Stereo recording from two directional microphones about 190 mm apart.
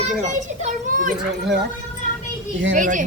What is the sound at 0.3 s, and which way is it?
Speech, 40° right (ahead or behind).